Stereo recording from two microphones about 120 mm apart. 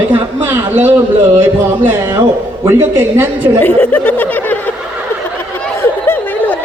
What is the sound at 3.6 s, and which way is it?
Speech, 15° left (ahead or behind).